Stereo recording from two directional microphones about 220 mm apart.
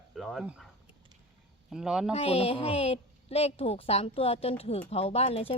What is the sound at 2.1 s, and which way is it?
A woman's voice, 25° left (ahead or behind).